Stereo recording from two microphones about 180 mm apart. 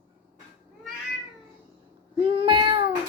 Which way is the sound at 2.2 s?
30° right (ahead or behind).